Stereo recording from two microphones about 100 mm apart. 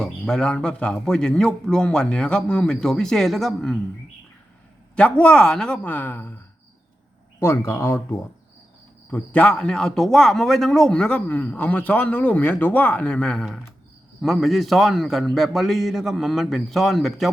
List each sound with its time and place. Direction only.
0.0 s speech: 5° left (ahead or behind)
4.9 s a man's voice: 10° left (ahead or behind)
9.0 s a man's voice: 15° left (ahead or behind)